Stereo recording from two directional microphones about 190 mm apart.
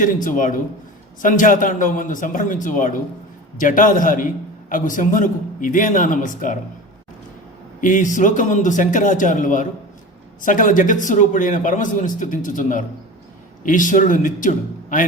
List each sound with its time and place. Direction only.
0.0 s a man's voice: 45° left (ahead or behind)
7.8 s a man's voice: 45° left (ahead or behind)